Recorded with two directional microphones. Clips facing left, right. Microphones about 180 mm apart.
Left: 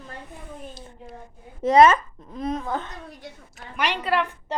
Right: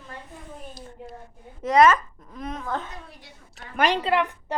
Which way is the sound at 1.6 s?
30° left (ahead or behind).